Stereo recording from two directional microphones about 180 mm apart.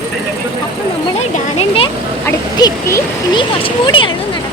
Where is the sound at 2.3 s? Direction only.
20° left (ahead or behind).